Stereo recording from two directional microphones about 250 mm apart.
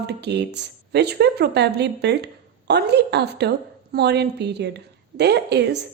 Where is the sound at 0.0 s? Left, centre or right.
Right.